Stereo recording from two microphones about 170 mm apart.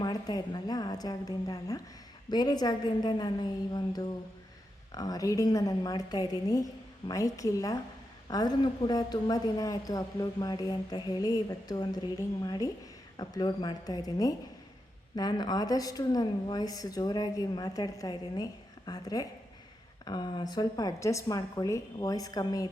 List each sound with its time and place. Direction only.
0.0 s a woman's voice: 25° left (ahead or behind)